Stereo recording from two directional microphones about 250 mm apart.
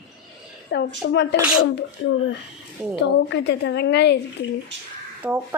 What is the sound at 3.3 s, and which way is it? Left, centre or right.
Speech, left.